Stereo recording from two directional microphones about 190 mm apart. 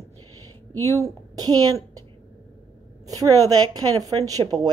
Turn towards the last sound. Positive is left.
turn(degrees=-20)  # may be behind; listen again after turning